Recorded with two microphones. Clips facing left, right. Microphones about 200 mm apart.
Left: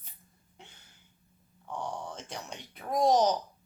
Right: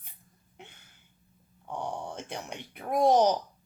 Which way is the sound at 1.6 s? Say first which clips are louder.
Right 2 dB; 10° right (ahead or behind).